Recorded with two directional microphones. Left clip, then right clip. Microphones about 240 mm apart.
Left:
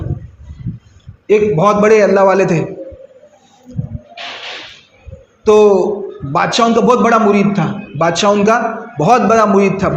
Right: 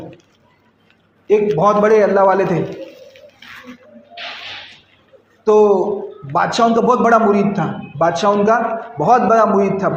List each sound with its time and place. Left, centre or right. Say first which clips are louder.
1.3 s a man's voice: left 2 dB; left
5.5 s a man's voice: left 3 dB; left